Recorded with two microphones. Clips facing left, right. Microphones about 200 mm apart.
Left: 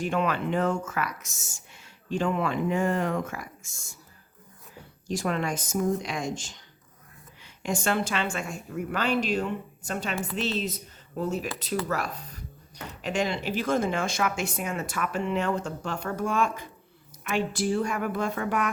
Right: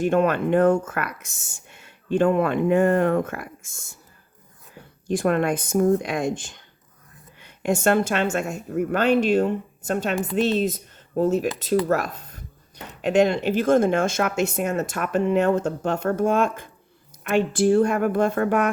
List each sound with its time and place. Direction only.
0.0 s speech: 55° right (ahead or behind)
5.0 s speech: 55° right (ahead or behind)
11.9 s speech: 50° right (ahead or behind)